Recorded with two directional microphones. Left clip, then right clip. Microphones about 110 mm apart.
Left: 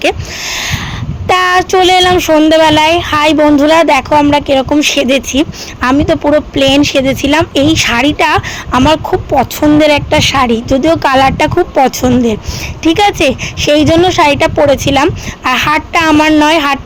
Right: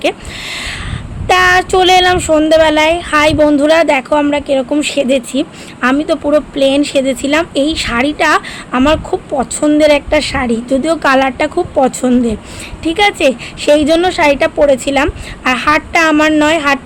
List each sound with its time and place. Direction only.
0.0 s a sound: 35° left (ahead or behind)
1.3 s speech: 40° left (ahead or behind)
14.2 s speech: 45° left (ahead or behind)